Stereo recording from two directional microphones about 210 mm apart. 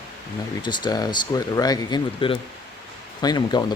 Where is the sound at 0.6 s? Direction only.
20° left (ahead or behind).